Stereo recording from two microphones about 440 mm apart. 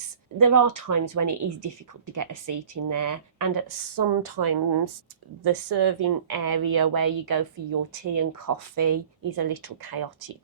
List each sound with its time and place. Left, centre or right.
0.3 s a woman's voice: right